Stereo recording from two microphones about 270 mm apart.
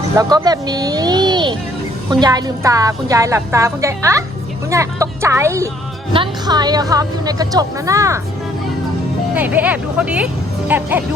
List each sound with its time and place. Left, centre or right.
0.2 s a woman's voice: centre
9.3 s a woman's voice: centre